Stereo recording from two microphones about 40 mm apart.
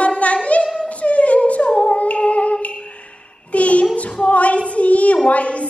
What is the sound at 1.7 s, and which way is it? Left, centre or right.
Humming, left.